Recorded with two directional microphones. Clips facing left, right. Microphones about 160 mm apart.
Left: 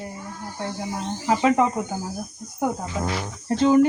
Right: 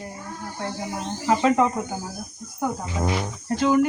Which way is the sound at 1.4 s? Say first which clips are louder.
Left 1 dB; 15° left (ahead or behind).